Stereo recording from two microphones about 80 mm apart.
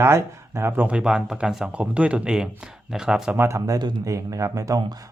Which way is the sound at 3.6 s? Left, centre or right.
Right.